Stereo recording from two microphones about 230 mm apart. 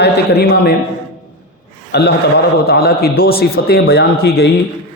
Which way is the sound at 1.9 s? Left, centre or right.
Left.